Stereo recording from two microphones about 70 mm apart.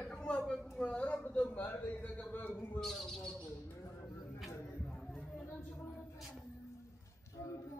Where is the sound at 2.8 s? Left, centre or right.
Centre.